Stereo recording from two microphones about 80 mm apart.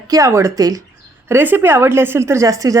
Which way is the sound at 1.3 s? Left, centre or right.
Right.